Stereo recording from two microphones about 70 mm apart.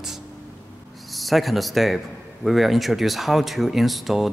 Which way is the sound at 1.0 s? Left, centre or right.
Centre.